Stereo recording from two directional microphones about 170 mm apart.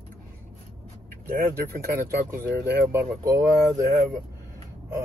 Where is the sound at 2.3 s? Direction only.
15° right (ahead or behind).